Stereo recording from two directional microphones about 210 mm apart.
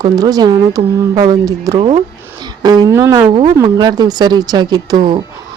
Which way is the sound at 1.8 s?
30° right (ahead or behind).